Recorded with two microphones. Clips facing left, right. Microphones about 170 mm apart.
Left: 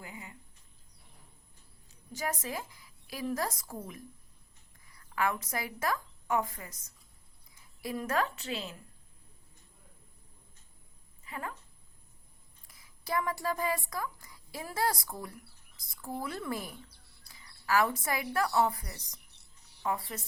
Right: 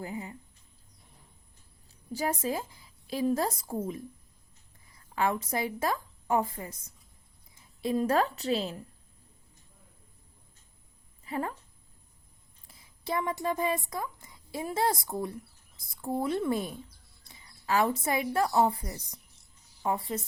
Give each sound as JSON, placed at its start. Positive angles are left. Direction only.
{"t": 0.0, "sound": "speech", "side_deg": -35}
{"t": 1.9, "sound": "a woman's voice", "side_deg": -30}
{"t": 11.3, "sound": "speech", "side_deg": -35}
{"t": 12.6, "sound": "a woman's voice", "side_deg": -25}
{"t": 16.9, "sound": "music", "side_deg": 65}
{"t": 17.2, "sound": "a sound", "side_deg": -25}
{"t": 18.3, "sound": "a woman's voice", "side_deg": -25}
{"t": 19.3, "sound": "a sound", "side_deg": 65}
{"t": 19.8, "sound": "a woman's voice", "side_deg": -25}